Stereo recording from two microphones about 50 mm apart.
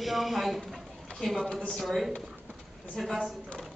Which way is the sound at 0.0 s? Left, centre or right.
Centre.